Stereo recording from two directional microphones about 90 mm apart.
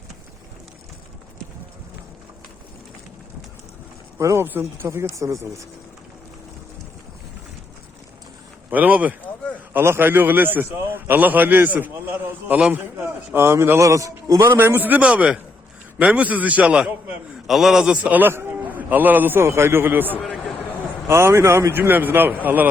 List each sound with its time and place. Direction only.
4.2 s a man's voice: 35° right (ahead or behind)
8.7 s a man's voice: 15° right (ahead or behind)
13.3 s a man's voice: 30° right (ahead or behind)
13.8 s a man's voice: 40° right (ahead or behind); by 22.7 s 20° right (ahead or behind)